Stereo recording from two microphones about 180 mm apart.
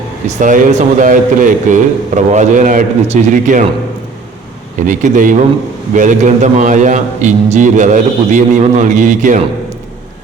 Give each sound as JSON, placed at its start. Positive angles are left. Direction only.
{"t": 0.3, "sound": "a man's voice", "side_deg": -45}
{"t": 4.9, "sound": "a man's voice", "side_deg": -45}